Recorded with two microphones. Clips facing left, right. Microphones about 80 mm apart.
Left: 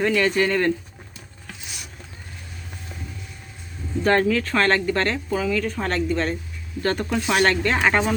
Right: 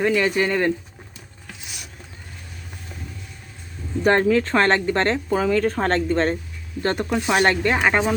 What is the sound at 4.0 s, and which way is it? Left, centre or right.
Speech, right.